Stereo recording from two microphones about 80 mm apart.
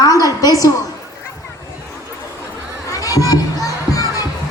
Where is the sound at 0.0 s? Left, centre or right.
Left.